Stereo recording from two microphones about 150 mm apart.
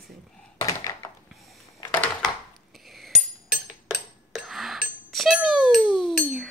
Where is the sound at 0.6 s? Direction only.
20° left (ahead or behind).